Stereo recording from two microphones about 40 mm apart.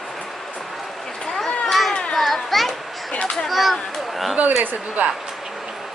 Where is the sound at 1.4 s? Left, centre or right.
Centre.